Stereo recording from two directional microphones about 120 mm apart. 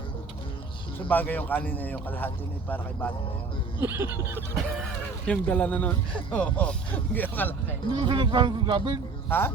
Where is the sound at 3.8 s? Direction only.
20° right (ahead or behind).